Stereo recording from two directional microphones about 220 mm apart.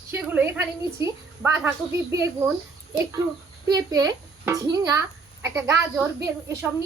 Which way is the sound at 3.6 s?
15° right (ahead or behind).